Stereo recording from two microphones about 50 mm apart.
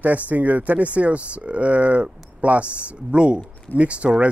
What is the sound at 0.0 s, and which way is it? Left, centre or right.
Speech, right.